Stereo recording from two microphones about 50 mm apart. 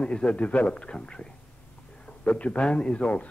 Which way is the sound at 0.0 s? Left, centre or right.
Centre.